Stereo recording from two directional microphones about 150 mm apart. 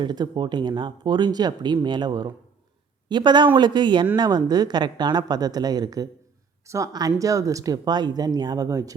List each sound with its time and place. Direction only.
0.0 s speech: 30° right (ahead or behind)